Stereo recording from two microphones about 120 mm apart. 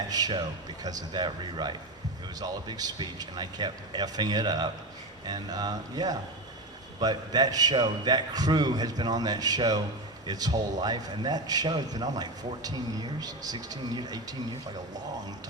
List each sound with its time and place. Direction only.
0.1 s a man's voice: 35° right (ahead or behind)